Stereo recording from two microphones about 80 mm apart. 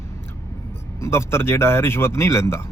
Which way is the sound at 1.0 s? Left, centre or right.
Left.